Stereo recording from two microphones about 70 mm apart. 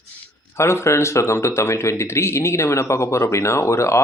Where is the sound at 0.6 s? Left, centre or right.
Left.